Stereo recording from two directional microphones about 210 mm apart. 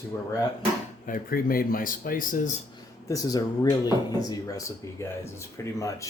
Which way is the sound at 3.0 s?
15° left (ahead or behind).